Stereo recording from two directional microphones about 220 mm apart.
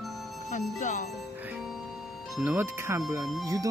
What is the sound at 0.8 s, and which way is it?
Speech, 35° left (ahead or behind).